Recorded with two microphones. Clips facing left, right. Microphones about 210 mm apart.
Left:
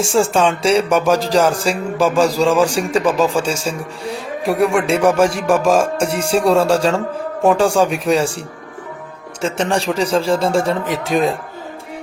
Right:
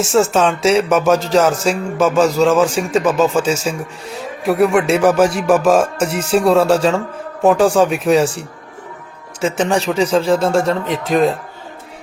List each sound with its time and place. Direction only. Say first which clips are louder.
0.0 s speech: right 1 dB; centre (ahead or behind)
3.6 s a man's voice: right 1 dB; 30° left (ahead or behind)
4.4 s speech: right 2 dB; centre (ahead or behind)
9.4 s speech: right 2 dB; 5° right (ahead or behind)